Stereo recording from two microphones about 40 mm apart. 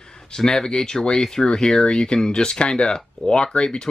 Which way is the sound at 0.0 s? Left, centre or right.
Centre.